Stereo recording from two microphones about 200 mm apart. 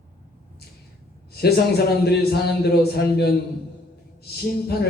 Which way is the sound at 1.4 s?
55° left (ahead or behind).